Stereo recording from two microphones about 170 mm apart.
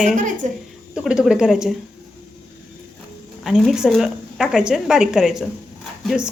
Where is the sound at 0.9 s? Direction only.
5° right (ahead or behind).